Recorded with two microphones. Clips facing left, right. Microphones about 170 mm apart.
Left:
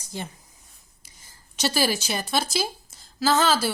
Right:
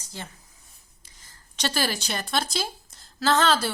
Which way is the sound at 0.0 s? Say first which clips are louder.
Left 5 dB; 15° left (ahead or behind).